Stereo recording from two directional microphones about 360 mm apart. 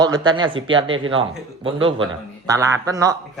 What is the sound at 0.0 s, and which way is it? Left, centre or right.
Speech, centre.